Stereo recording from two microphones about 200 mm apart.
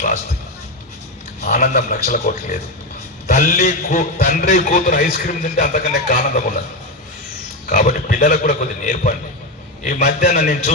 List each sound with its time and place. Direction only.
1.5 s a man's voice: 40° left (ahead or behind)
7.7 s a man's voice: 45° left (ahead or behind)